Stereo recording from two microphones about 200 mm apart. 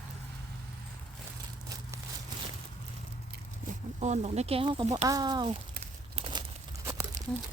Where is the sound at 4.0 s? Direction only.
35° right (ahead or behind).